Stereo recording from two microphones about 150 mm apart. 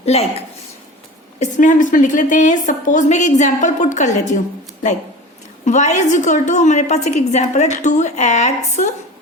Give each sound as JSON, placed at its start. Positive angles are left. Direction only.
{"t": 0.0, "sound": "a woman's voice", "side_deg": 45}
{"t": 1.4, "sound": "a woman's voice", "side_deg": 60}
{"t": 5.6, "sound": "a woman's voice", "side_deg": 50}